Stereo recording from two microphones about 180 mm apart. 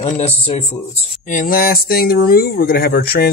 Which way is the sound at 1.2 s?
50° left (ahead or behind).